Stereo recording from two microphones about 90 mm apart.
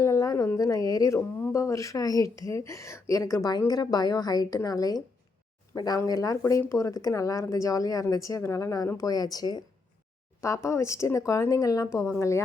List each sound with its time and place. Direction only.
0.0 s a sound: 35° left (ahead or behind)
1.5 s a woman's voice: 35° left (ahead or behind)
10.4 s speech: 35° left (ahead or behind)